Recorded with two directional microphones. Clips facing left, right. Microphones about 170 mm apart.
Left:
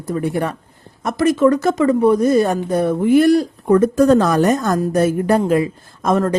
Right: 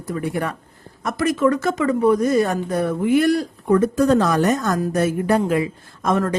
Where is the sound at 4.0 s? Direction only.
45° left (ahead or behind).